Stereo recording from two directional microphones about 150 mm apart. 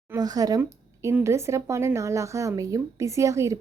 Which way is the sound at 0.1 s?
25° right (ahead or behind).